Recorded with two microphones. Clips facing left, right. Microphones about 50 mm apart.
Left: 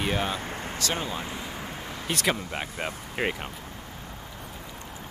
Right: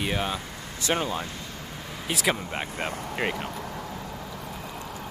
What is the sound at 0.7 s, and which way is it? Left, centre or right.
Speech, right.